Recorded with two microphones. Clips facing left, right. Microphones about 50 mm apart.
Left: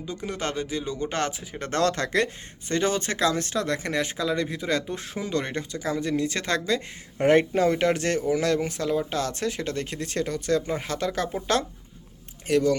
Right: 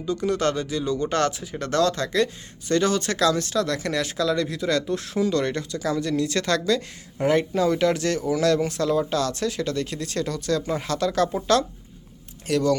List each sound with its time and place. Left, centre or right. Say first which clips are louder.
0.0 s speech: right 8 dB; centre
1.7 s speech: right 2 dB; left
2.6 s speech: right 3 dB; left
7.2 s speech: left 1 dB; left